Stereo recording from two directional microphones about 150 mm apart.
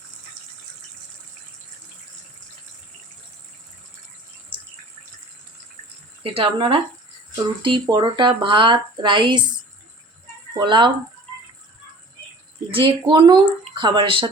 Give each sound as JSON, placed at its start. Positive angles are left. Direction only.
{"t": 6.3, "sound": "speech", "side_deg": -35}
{"t": 10.6, "sound": "speech", "side_deg": -30}
{"t": 12.7, "sound": "speech", "side_deg": -35}